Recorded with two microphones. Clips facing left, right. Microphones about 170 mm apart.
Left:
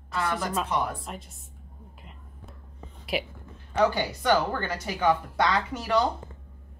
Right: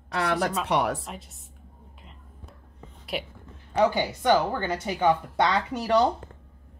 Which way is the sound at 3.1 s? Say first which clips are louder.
Left 2 dB; 5° left (ahead or behind).